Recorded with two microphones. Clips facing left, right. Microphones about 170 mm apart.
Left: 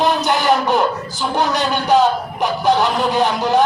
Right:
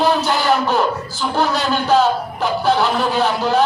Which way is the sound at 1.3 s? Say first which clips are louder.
Even; 20° left (ahead or behind).